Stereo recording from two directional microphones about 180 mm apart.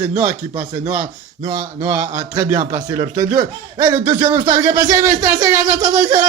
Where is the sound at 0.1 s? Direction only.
40° right (ahead or behind).